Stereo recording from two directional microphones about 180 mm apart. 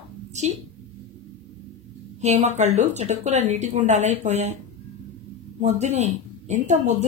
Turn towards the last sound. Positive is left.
turn(degrees=-40)  # may be behind; listen again after turning